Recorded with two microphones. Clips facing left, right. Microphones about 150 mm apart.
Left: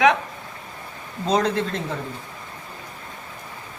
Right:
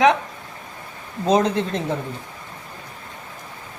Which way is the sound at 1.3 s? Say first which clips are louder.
Right 3 dB; 20° right (ahead or behind).